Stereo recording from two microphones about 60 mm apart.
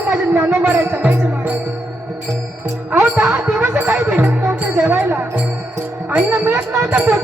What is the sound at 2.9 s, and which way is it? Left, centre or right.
Music, right.